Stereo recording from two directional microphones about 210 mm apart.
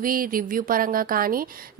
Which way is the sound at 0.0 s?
45° right (ahead or behind).